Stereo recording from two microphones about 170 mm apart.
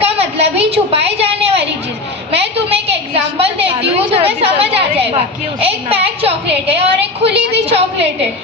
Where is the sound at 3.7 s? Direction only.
35° right (ahead or behind).